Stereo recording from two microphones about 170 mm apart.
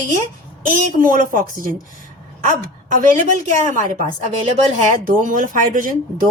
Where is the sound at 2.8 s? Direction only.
50° right (ahead or behind).